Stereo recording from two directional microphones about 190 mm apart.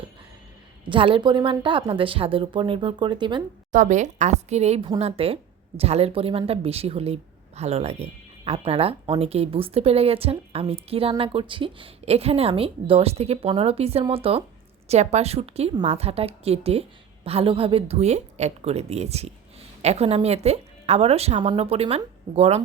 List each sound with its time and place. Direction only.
0.9 s a woman's voice: 25° right (ahead or behind)
3.7 s a woman's voice: 40° right (ahead or behind)